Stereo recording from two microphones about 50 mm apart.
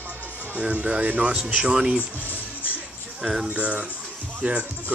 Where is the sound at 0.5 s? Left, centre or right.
Right.